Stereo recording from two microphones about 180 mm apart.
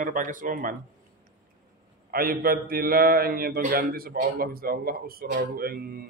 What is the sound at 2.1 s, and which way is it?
A man's voice, 55° right (ahead or behind).